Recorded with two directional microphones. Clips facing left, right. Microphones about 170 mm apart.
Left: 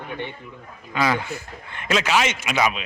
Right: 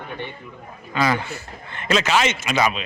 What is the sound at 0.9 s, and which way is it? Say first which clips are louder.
Speech: right 1 dB; 10° left (ahead or behind).